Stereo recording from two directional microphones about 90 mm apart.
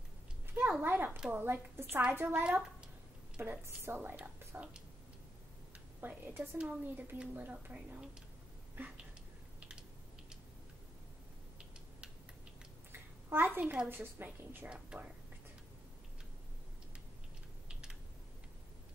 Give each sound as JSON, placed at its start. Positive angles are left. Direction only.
{"t": 0.7, "sound": "a woman's voice", "side_deg": -25}
{"t": 2.4, "sound": "speech", "side_deg": -15}
{"t": 3.3, "sound": "a woman's voice", "side_deg": -25}
{"t": 5.9, "sound": "a woman's voice", "side_deg": -20}
{"t": 8.7, "sound": "a sound", "side_deg": -20}
{"t": 9.6, "sound": "a sound", "side_deg": -10}
{"t": 12.9, "sound": "a woman's voice", "side_deg": -25}
{"t": 14.7, "sound": "a woman's voice", "side_deg": -10}